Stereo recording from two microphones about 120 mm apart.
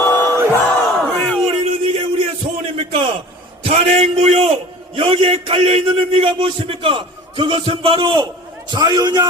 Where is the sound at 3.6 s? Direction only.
65° right (ahead or behind).